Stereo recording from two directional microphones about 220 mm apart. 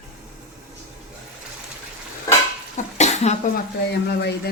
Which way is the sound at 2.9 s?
30° left (ahead or behind).